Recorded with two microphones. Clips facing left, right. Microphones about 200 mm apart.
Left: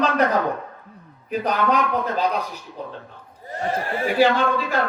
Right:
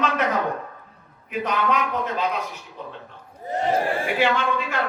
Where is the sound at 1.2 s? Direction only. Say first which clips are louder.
Left 2 dB; 35° left (ahead or behind).